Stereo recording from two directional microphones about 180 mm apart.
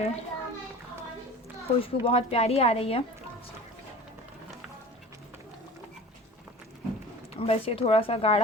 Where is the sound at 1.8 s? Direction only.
30° left (ahead or behind).